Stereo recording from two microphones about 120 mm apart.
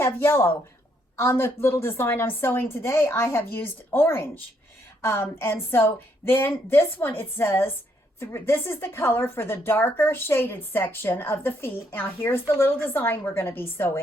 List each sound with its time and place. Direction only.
0.0 s a woman's voice: 20° left (ahead or behind)